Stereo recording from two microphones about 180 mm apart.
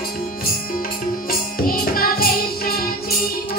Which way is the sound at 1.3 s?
55° left (ahead or behind).